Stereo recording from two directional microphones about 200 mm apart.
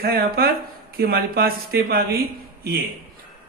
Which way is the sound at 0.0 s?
50° right (ahead or behind).